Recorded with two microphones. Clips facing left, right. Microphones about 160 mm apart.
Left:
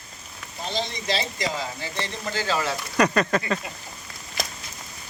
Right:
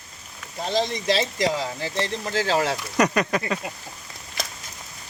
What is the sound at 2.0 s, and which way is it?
Speech, 90° right.